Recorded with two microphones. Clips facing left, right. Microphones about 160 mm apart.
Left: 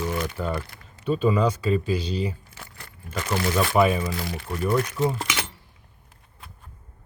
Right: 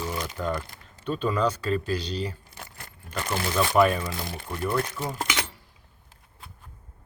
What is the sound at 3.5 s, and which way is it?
Speech, 5° left (ahead or behind).